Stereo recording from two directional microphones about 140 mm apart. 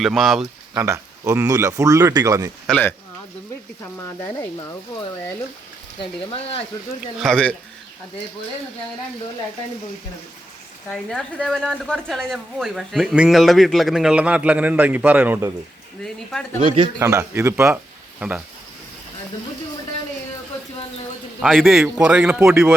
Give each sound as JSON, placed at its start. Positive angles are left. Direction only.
{"t": 0.0, "sound": "a woman's voice", "side_deg": 0}
{"t": 0.7, "sound": "speech", "side_deg": -20}
{"t": 2.6, "sound": "speech", "side_deg": 10}
{"t": 6.0, "sound": "speech", "side_deg": 45}
{"t": 7.2, "sound": "a woman's voice", "side_deg": 5}
{"t": 10.8, "sound": "a woman's voice", "side_deg": 0}
{"t": 16.0, "sound": "a woman's voice", "side_deg": 5}
{"t": 16.6, "sound": "a man's voice", "side_deg": -35}
{"t": 17.0, "sound": "speech", "side_deg": -20}
{"t": 18.2, "sound": "speech", "side_deg": -10}
{"t": 21.4, "sound": "a woman's voice", "side_deg": 0}